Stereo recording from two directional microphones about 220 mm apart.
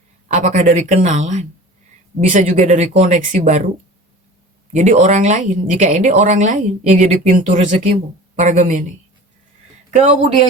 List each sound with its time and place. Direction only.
0.3 s speech: 35° right (ahead or behind)
4.7 s speech: 30° right (ahead or behind)
9.9 s a man's voice: 30° right (ahead or behind)